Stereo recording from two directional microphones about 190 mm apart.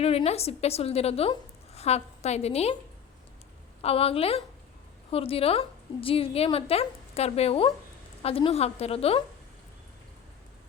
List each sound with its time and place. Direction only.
0.0 s a woman's voice: 30° left (ahead or behind)
3.8 s a woman's voice: 30° left (ahead or behind)